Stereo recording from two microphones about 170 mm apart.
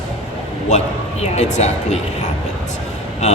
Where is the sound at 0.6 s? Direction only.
40° left (ahead or behind).